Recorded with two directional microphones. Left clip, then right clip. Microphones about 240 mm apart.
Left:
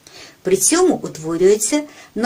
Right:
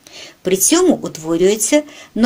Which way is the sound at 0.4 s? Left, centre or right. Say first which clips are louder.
Right 1 dB; right.